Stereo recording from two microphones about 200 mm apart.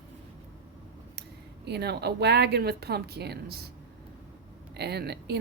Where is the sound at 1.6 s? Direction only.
55° right (ahead or behind).